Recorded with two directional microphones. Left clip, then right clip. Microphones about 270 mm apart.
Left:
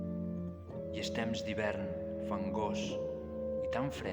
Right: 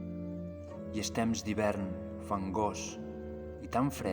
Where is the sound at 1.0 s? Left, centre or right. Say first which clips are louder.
Right 3 dB; right.